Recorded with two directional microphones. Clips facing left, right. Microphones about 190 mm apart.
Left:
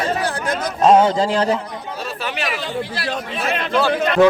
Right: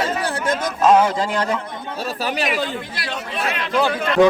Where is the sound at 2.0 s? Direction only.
40° right (ahead or behind).